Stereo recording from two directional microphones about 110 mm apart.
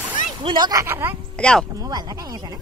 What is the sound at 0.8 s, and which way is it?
Speech, 20° right (ahead or behind).